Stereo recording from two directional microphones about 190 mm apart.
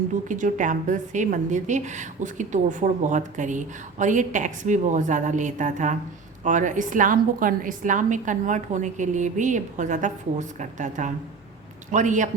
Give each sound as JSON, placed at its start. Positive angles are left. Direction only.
{"t": 0.3, "sound": "a woman's voice", "side_deg": -40}